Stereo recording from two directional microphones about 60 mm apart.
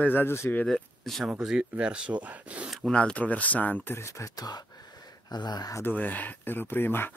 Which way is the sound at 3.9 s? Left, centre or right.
Left.